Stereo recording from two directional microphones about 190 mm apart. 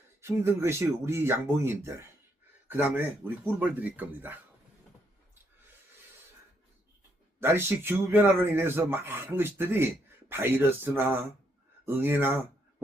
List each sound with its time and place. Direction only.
0.2 s speech: 15° right (ahead or behind)
7.3 s speech: 10° right (ahead or behind)